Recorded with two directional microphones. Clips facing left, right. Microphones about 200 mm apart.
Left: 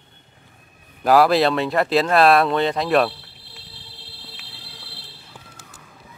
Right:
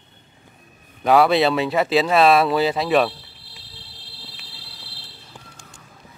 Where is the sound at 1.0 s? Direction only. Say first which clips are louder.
Even; centre (ahead or behind).